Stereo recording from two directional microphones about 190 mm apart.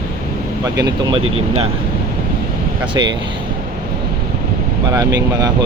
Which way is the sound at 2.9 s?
25° right (ahead or behind).